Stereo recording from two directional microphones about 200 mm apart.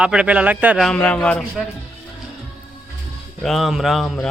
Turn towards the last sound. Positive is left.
turn(degrees=0)  # may be behind; listen again after turning